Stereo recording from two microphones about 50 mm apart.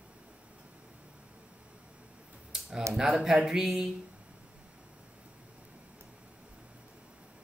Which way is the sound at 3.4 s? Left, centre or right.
Centre.